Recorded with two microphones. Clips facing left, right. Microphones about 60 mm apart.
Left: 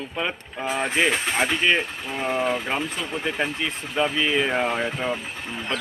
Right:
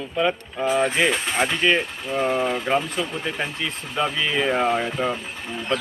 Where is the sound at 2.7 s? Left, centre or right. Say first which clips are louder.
Right 5 dB; centre.